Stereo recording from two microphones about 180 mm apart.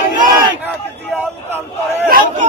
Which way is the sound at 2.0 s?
50° right (ahead or behind).